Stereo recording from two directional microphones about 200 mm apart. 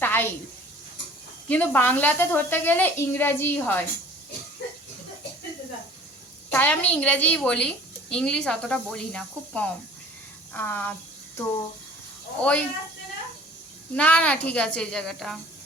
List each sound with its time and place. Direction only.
0.0 s a sound: 10° left (ahead or behind)
1.5 s speech: 10° left (ahead or behind)
6.5 s a woman's voice: 10° left (ahead or behind)
12.4 s speech: 10° left (ahead or behind)
13.9 s speech: 5° left (ahead or behind)